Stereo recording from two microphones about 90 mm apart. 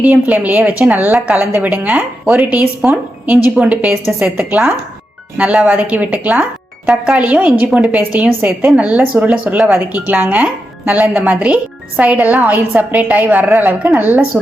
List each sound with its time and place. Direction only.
0.0 s a woman's voice: 20° right (ahead or behind)